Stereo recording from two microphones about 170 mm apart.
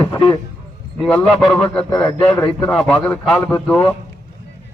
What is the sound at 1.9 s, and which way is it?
A man's voice, 5° left (ahead or behind).